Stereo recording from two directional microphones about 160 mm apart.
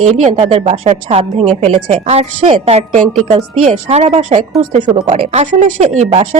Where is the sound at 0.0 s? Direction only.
45° right (ahead or behind).